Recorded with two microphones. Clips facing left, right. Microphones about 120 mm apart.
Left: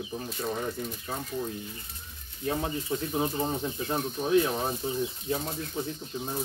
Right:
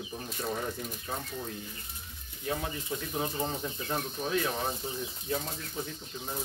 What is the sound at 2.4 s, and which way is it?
Speech, 20° left (ahead or behind).